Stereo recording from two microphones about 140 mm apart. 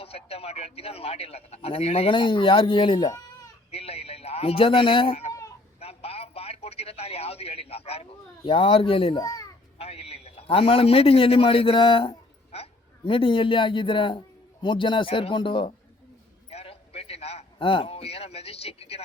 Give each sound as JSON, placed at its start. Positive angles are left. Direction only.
{"t": 0.0, "sound": "speech", "side_deg": 45}
{"t": 5.3, "sound": "a sound", "side_deg": 25}
{"t": 5.8, "sound": "radio", "side_deg": 45}
{"t": 8.4, "sound": "speech", "side_deg": 40}
{"t": 9.2, "sound": "a child's voice", "side_deg": 25}
{"t": 9.7, "sound": "a man's voice", "side_deg": 45}
{"t": 16.5, "sound": "a man's voice", "side_deg": 45}